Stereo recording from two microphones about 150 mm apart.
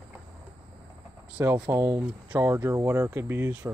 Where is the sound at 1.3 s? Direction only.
15° right (ahead or behind).